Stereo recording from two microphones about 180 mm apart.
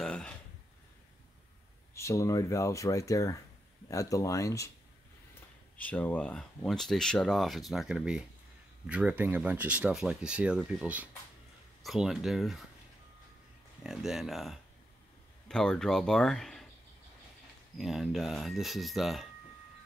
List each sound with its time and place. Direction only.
0.0 s a sound: 5° left (ahead or behind)
2.0 s speech: 15° left (ahead or behind)
5.8 s speech: 10° left (ahead or behind)
13.8 s speech: centre (ahead or behind)
17.7 s speech: centre (ahead or behind)